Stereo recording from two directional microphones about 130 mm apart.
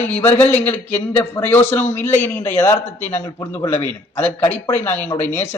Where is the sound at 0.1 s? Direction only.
15° left (ahead or behind).